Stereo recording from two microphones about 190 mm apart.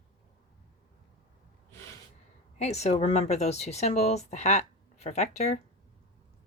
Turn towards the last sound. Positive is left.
turn(degrees=35)  # may be behind; listen again after turning